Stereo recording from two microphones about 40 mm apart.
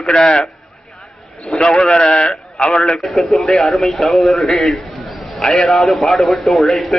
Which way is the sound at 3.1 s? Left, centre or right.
Centre.